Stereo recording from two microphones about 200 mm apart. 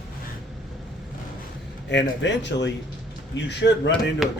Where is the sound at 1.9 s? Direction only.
60° left (ahead or behind).